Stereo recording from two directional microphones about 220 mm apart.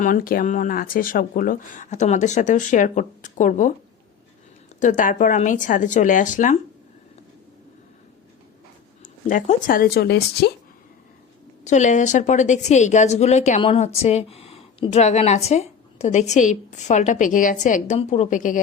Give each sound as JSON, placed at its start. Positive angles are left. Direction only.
{"t": 0.0, "sound": "a woman's voice", "side_deg": 40}
{"t": 4.8, "sound": "a woman's voice", "side_deg": 35}
{"t": 9.3, "sound": "speech", "side_deg": 35}
{"t": 11.6, "sound": "a woman's voice", "side_deg": 35}